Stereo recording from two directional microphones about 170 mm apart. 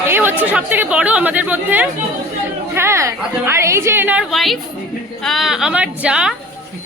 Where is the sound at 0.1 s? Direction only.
15° right (ahead or behind).